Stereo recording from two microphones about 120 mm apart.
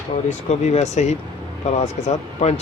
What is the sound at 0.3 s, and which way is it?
Speech, 70° left (ahead or behind).